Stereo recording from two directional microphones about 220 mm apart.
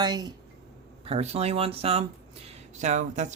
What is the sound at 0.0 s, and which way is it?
Speech, 20° right (ahead or behind).